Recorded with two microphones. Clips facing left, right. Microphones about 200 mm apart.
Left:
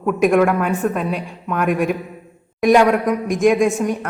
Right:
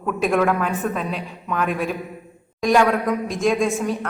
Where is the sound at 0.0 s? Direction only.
10° left (ahead or behind).